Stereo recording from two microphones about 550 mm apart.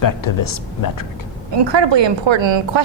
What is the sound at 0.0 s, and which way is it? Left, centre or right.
Speech, left.